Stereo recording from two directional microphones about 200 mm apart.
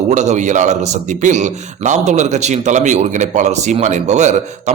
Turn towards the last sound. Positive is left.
turn(degrees=-35)  # may be behind; listen again after turning